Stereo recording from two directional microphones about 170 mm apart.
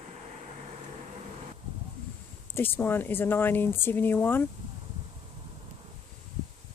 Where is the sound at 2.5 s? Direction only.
10° left (ahead or behind).